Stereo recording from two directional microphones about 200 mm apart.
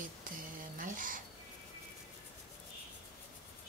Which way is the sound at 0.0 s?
45° right (ahead or behind).